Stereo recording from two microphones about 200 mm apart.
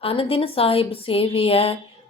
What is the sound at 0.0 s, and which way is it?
A woman's voice, 30° left (ahead or behind).